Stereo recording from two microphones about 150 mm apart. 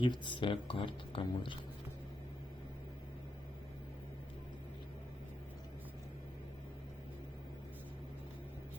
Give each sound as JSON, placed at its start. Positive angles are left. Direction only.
{"t": 0.0, "sound": "speech", "side_deg": 30}